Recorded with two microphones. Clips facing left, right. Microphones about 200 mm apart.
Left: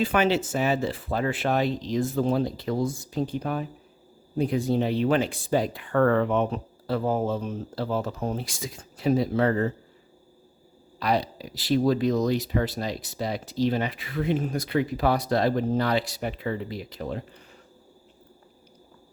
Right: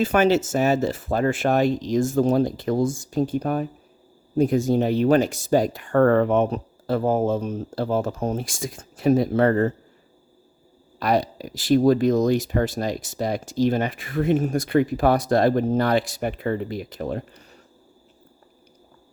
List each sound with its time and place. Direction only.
0.0 s speech: 45° right (ahead or behind)
11.0 s speech: 45° right (ahead or behind)